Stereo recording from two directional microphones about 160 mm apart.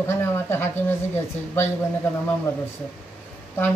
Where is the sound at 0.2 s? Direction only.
15° left (ahead or behind).